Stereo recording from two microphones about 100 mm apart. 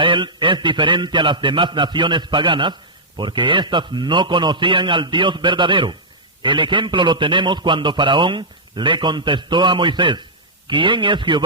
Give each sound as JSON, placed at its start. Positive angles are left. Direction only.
{"t": 0.0, "sound": "a man's voice", "side_deg": -55}